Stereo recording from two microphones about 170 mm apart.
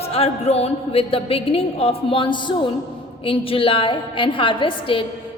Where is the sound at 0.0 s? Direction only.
35° left (ahead or behind).